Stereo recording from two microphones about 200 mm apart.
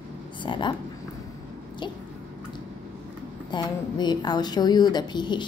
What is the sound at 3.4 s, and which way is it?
A woman's voice, 20° left (ahead or behind).